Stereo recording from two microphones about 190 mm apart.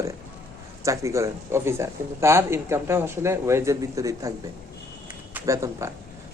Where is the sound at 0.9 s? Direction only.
15° right (ahead or behind).